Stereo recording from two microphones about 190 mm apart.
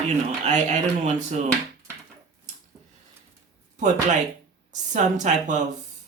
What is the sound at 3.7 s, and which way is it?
Speech, 40° right (ahead or behind).